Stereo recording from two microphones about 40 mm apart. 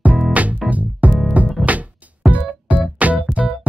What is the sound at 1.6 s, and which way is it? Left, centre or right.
Music, right.